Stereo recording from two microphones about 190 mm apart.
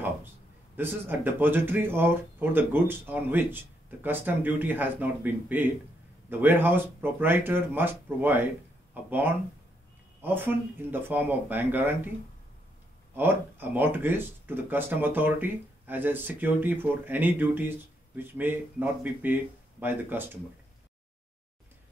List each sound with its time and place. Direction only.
0.7 s speech: 10° right (ahead or behind)
13.1 s speech: 10° right (ahead or behind)